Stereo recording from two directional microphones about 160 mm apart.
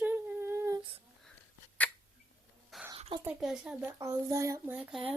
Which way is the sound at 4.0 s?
20° right (ahead or behind).